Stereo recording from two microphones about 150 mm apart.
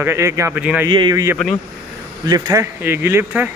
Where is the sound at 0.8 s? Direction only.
30° right (ahead or behind).